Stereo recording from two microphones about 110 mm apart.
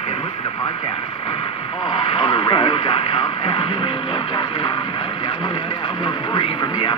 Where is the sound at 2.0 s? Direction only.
50° left (ahead or behind).